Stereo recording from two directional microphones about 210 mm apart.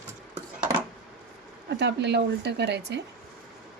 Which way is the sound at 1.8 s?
55° right (ahead or behind).